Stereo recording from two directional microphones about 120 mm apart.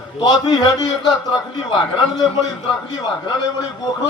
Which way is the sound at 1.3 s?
45° left (ahead or behind).